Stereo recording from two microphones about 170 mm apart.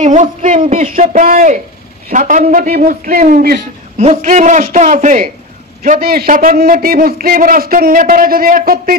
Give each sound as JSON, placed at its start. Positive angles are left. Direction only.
{"t": 0.0, "sound": "a man's voice", "side_deg": -45}